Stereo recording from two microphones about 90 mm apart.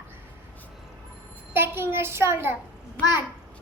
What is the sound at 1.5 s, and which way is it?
A child's voice, 25° right (ahead or behind).